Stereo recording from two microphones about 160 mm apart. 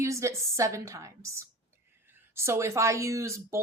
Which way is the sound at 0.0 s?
20° right (ahead or behind).